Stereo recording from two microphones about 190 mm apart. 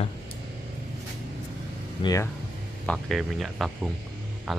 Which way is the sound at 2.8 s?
Centre (ahead or behind).